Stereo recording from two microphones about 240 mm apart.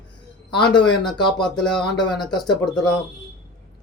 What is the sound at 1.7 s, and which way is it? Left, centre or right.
Speech, centre.